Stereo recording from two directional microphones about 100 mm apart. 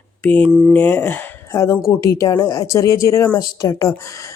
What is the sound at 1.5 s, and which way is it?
Speech, 30° left (ahead or behind).